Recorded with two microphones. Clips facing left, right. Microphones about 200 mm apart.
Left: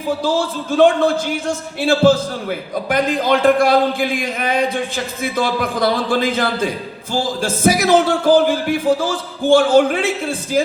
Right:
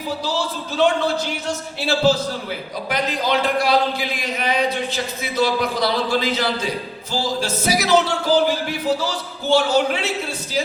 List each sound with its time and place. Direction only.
0.2 s a man's voice: 50° left (ahead or behind)